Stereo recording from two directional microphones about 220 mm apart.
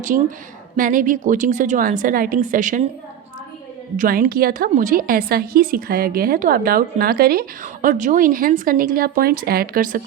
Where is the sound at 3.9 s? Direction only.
40° right (ahead or behind).